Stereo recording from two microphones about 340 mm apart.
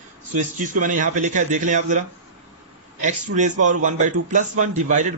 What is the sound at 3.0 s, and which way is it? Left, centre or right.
A man's voice, right.